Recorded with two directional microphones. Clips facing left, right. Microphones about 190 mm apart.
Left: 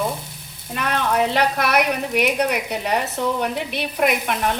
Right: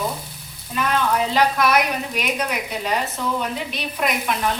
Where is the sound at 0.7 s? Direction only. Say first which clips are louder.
Even; 65° left (ahead or behind).